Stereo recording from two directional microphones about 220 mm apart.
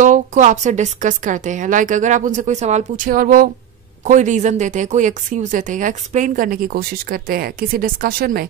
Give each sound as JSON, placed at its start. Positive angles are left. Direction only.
{"t": 0.0, "sound": "a woman's voice", "side_deg": -35}